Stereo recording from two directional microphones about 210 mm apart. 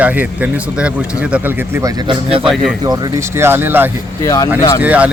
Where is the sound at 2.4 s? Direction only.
Centre (ahead or behind).